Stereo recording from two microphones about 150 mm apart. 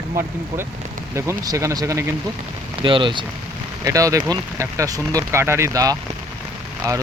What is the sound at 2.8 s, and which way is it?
Speech, 35° right (ahead or behind).